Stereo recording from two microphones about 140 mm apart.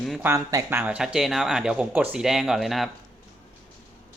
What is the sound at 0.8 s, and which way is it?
Speech, 5° right (ahead or behind).